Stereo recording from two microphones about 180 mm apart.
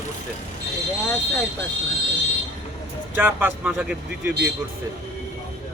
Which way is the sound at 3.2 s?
10° right (ahead or behind).